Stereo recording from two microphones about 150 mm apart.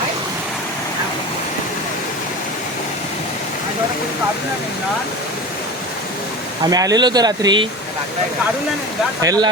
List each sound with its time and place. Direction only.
6.7 s speech: 25° right (ahead or behind)
9.2 s speech: 25° right (ahead or behind)